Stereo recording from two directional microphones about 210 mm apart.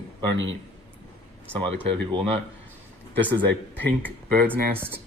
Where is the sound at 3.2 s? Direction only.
10° left (ahead or behind).